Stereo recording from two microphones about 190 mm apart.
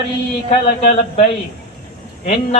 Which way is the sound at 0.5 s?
30° left (ahead or behind).